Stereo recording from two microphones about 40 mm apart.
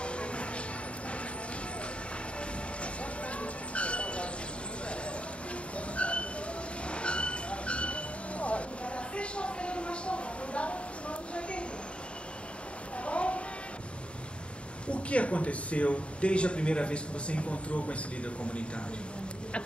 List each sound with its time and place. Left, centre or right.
0.0 s music: left
2.8 s a sound: left
5.8 s dog: left
6.9 s train: left
13.0 s a sound: left
14.9 s speech: left